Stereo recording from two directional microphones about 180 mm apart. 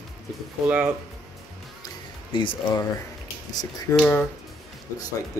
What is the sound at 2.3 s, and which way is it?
Speech, 25° left (ahead or behind).